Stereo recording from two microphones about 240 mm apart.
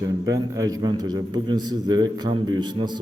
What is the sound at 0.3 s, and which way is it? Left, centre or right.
A man's voice, centre.